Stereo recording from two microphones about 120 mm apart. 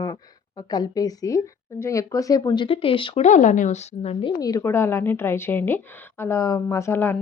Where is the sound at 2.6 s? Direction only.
50° left (ahead or behind).